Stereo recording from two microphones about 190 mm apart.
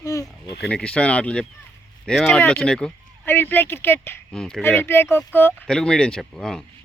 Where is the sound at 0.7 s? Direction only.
5° left (ahead or behind).